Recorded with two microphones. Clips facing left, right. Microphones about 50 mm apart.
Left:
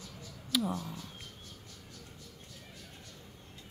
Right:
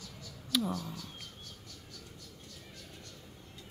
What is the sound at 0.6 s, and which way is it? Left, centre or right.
Speech, left.